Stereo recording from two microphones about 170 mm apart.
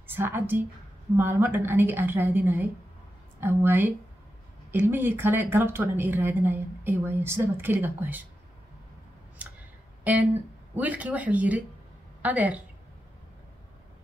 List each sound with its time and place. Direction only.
0.0 s a woman's voice: 10° right (ahead or behind)
10.7 s a woman's voice: 10° right (ahead or behind)